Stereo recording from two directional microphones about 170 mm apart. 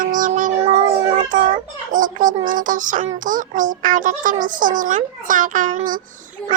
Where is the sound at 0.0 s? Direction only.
50° right (ahead or behind).